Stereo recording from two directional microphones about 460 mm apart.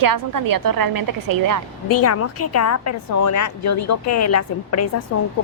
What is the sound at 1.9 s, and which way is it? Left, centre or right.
A woman's voice, left.